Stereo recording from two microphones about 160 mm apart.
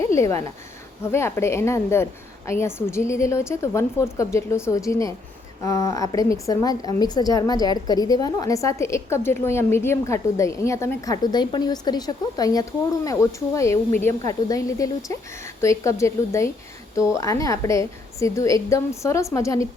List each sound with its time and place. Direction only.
0.1 s a woman's voice: 15° left (ahead or behind)